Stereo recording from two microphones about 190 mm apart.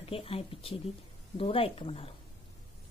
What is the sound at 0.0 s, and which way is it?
Speech, 30° left (ahead or behind).